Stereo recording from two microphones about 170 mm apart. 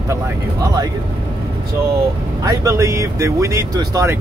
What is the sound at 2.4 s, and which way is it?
Speech, 20° right (ahead or behind).